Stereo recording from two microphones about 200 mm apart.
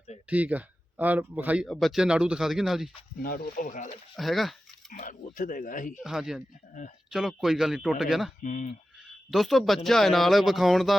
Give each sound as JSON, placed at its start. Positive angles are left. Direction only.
{"t": 0.3, "sound": "speech", "side_deg": -10}
{"t": 3.2, "sound": "speech", "side_deg": 50}
{"t": 4.1, "sound": "speech", "side_deg": 0}
{"t": 4.9, "sound": "speech", "side_deg": 40}
{"t": 6.0, "sound": "speech", "side_deg": 0}
{"t": 6.8, "sound": "speech", "side_deg": 40}
{"t": 7.1, "sound": "speech", "side_deg": 0}
{"t": 8.4, "sound": "speech", "side_deg": 35}
{"t": 9.3, "sound": "speech", "side_deg": 0}